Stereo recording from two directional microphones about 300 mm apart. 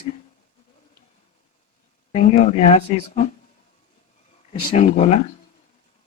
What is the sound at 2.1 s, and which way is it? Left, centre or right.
Speech, left.